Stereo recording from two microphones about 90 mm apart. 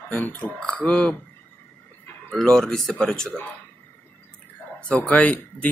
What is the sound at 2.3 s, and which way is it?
Speech, 5° left (ahead or behind).